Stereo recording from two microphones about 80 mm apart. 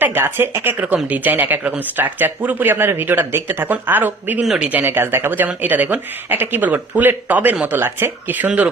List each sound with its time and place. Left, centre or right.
0.0 s speech: right
4.4 s speech: centre
4.7 s speech: right